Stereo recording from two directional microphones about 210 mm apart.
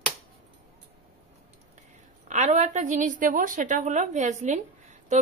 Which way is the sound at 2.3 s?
35° right (ahead or behind).